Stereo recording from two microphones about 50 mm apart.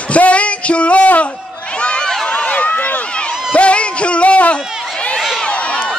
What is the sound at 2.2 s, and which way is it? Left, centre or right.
Run, left.